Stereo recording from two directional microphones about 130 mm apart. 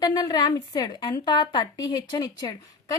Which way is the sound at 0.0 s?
30° left (ahead or behind).